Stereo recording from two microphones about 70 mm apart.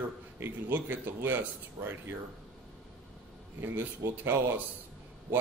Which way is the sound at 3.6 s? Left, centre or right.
Right.